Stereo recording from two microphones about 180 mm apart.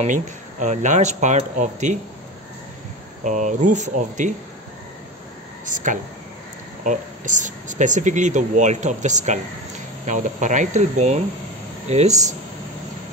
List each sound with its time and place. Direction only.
0.0 s speech: 45° right (ahead or behind)
3.3 s speech: 45° right (ahead or behind)
5.7 s speech: 45° right (ahead or behind)